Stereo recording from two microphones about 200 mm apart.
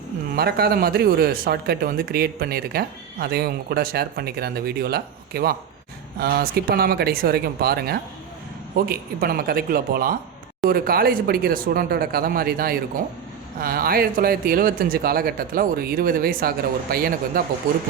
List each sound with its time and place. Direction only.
0.3 s speech: 50° right (ahead or behind)